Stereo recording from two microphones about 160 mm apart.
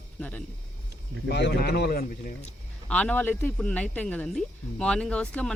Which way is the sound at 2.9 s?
10° left (ahead or behind).